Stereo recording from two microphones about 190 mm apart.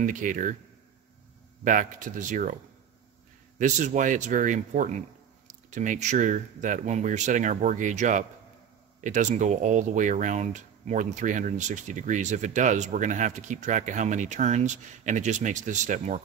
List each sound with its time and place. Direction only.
0.0 s speech: 45° right (ahead or behind)
1.6 s speech: 45° right (ahead or behind)
3.5 s speech: 40° right (ahead or behind)